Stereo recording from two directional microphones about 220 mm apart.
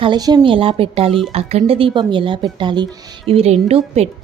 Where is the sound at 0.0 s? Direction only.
20° right (ahead or behind).